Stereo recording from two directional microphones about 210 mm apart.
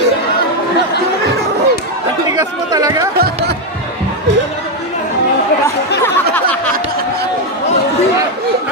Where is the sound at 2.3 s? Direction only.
15° right (ahead or behind).